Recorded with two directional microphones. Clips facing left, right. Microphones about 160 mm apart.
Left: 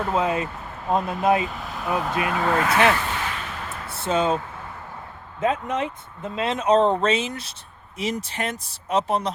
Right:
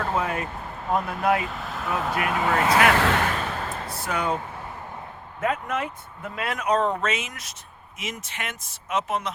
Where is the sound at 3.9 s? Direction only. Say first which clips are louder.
Left 6 dB; 25° left (ahead or behind).